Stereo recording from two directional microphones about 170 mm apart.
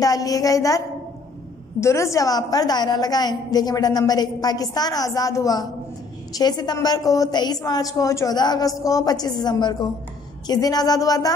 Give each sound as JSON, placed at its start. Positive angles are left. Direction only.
{"t": 0.0, "sound": "a woman's voice", "side_deg": 20}